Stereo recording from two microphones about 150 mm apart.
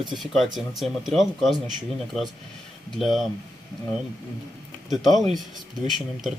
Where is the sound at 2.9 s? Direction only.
Centre (ahead or behind).